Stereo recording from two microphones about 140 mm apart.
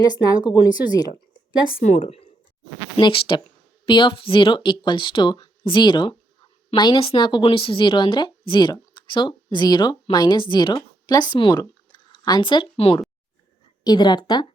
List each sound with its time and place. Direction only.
0.0 s speech: 30° left (ahead or behind)
2.0 s a woman's voice: 45° left (ahead or behind); by 14.4 s 30° left (ahead or behind)